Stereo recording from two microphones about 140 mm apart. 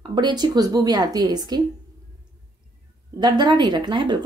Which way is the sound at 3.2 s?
30° right (ahead or behind).